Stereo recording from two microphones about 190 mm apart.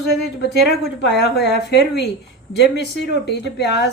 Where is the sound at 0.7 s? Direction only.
60° left (ahead or behind).